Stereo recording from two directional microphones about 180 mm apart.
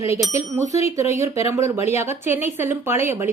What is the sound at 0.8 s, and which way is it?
A woman's voice, 15° right (ahead or behind).